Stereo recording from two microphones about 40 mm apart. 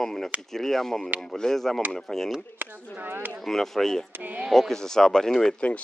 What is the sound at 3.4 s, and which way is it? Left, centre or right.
Speech, centre.